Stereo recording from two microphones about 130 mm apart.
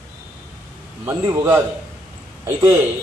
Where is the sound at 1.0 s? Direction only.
25° right (ahead or behind).